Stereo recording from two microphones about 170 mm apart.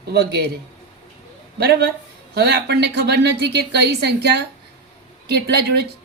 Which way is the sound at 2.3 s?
75° right (ahead or behind).